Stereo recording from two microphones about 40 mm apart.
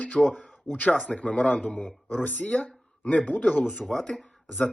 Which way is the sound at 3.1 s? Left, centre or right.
Left.